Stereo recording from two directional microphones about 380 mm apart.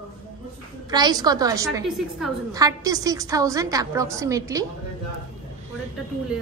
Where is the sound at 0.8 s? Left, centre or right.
Centre.